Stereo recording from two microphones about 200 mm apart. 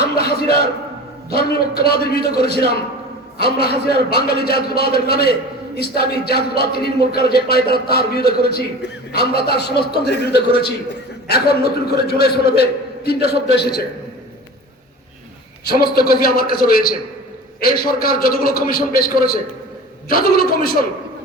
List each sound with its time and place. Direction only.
0.0 s a sound: 50° left (ahead or behind)
1.3 s a man's voice: 50° left (ahead or behind)
15.6 s a man's voice: 50° left (ahead or behind)